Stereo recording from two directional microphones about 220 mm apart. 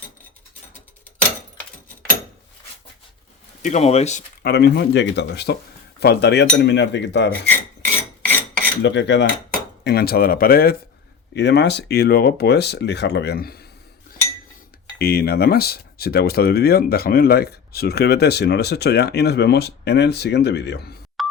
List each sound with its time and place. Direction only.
3.6 s speech: 30° left (ahead or behind)
4.4 s speech: 45° left (ahead or behind)
8.2 s filing: 5° left (ahead or behind)
8.8 s speech: 55° left (ahead or behind)
14.9 s speech: 45° left (ahead or behind)
21.2 s music: centre (ahead or behind)